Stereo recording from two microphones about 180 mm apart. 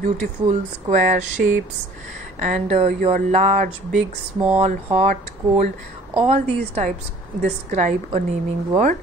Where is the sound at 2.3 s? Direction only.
45° right (ahead or behind).